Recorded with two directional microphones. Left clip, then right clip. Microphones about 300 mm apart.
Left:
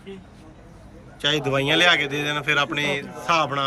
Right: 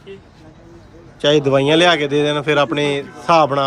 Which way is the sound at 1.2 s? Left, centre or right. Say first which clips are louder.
Right 8 dB; centre.